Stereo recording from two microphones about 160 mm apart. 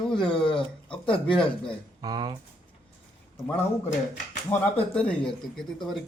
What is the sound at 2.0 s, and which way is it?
Speech, 25° right (ahead or behind).